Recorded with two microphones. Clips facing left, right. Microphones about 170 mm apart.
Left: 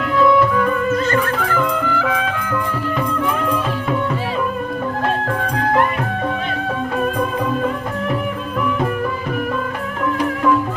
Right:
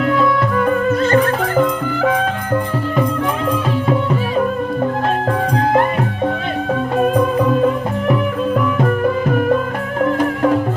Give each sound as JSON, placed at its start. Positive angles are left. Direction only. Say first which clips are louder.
{"t": 1.1, "sound": "music", "louder": "right 5 dB", "side_deg": -30}
{"t": 1.5, "sound": "music", "louder": "right 3 dB", "side_deg": -50}
{"t": 10.0, "sound": "music", "louder": "right 4 dB", "side_deg": -50}